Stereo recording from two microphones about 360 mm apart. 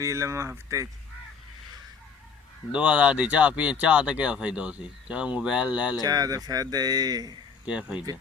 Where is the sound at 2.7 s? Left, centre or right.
Centre.